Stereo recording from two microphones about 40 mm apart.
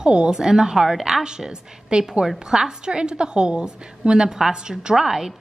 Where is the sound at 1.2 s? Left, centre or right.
Centre.